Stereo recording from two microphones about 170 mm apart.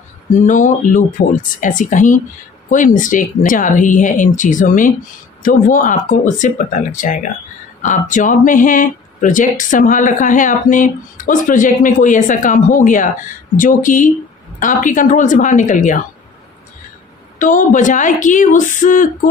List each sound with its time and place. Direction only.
0.3 s speech: 50° left (ahead or behind)
17.4 s speech: 50° left (ahead or behind)